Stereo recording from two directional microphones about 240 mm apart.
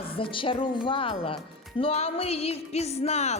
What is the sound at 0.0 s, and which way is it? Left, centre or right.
A child's voice, left.